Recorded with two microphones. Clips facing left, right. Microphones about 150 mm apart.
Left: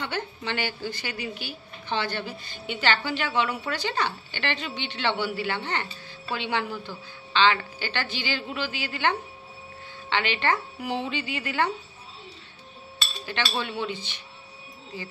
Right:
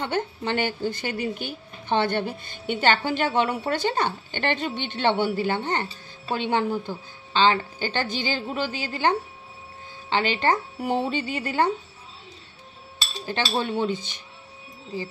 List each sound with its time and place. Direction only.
0.0 s a woman's voice: 50° right (ahead or behind)
13.2 s a woman's voice: 40° right (ahead or behind)